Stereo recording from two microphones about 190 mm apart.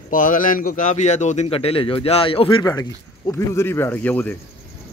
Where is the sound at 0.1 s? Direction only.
45° left (ahead or behind); by 4.3 s 10° left (ahead or behind).